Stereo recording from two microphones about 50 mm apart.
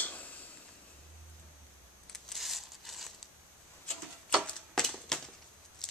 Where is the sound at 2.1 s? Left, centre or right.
Centre.